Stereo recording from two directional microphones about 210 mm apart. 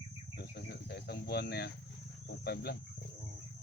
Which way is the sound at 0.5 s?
50° left (ahead or behind).